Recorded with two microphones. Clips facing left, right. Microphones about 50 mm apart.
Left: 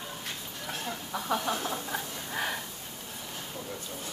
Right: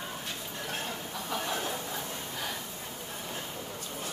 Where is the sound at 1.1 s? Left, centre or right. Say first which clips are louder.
Left 6 dB; left.